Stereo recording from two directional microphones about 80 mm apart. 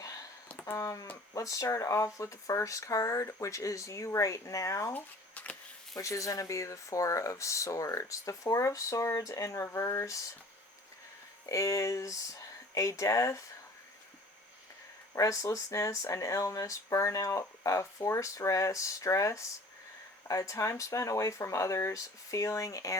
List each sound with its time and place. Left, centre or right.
0.0 s a sound: left
1.3 s speech: left
4.9 s a sound: centre
6.0 s speech: left
11.4 s speech: left
15.1 s speech: left